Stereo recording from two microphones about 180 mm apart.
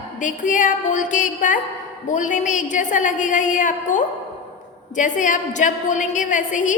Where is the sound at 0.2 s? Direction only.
45° left (ahead or behind).